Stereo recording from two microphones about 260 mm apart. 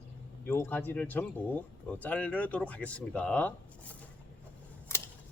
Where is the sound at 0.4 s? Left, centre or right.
Centre.